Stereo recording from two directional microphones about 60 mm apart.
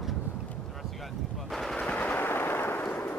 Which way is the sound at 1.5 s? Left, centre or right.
Centre.